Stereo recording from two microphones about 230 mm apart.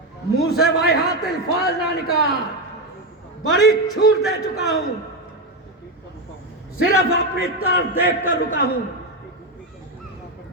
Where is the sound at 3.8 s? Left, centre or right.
Centre.